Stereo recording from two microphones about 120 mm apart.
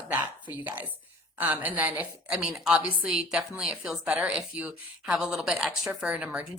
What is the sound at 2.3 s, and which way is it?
Speech, 5° right (ahead or behind).